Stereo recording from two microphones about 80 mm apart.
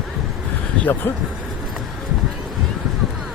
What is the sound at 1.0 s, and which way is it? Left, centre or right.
Speech, left.